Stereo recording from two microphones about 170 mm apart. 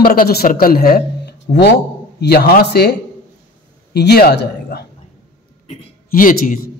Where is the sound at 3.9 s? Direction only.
70° left (ahead or behind).